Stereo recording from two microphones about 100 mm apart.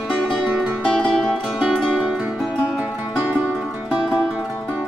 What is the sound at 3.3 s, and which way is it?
Music, 5° right (ahead or behind).